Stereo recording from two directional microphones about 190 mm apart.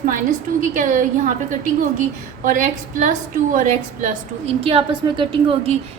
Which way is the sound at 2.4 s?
45° right (ahead or behind).